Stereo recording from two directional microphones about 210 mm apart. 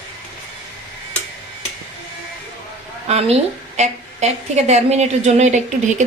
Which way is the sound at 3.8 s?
30° right (ahead or behind).